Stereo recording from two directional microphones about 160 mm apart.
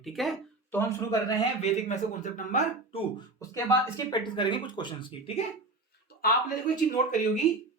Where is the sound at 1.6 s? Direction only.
45° left (ahead or behind).